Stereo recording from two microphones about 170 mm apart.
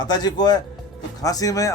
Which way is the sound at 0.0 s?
25° left (ahead or behind).